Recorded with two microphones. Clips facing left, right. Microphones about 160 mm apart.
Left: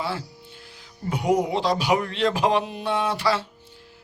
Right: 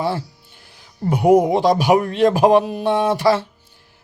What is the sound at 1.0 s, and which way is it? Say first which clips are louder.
A man's voice: right 9 dB; 50° right (ahead or behind).